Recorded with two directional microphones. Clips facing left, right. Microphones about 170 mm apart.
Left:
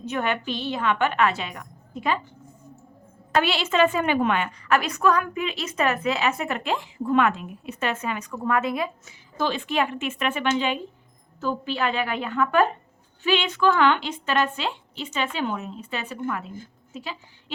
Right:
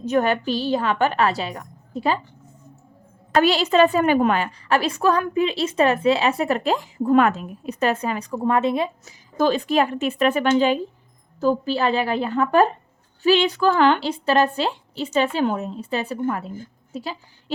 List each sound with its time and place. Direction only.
0.0 s a woman's voice: 40° right (ahead or behind)
3.3 s a woman's voice: 40° right (ahead or behind)
9.4 s a woman's voice: 40° right (ahead or behind)